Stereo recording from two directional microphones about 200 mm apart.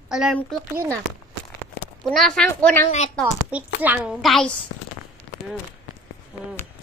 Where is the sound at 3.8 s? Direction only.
5° right (ahead or behind).